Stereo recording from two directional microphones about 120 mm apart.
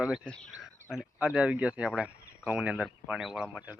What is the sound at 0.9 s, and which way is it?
Speech, 5° right (ahead or behind).